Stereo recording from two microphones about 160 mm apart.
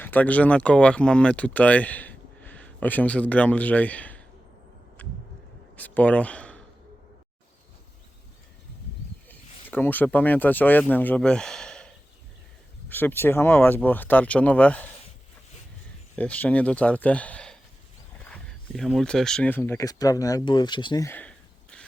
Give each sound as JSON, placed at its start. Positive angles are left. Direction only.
{"t": 0.0, "sound": "speech", "side_deg": 10}
{"t": 5.0, "sound": "a sound", "side_deg": 10}
{"t": 5.7, "sound": "speech", "side_deg": 10}
{"t": 9.3, "sound": "speech", "side_deg": 10}
{"t": 12.9, "sound": "speech", "side_deg": 10}
{"t": 16.1, "sound": "speech", "side_deg": 10}
{"t": 21.1, "sound": "a sound", "side_deg": 10}